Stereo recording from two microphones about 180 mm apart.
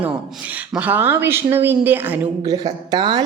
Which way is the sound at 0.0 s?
10° right (ahead or behind).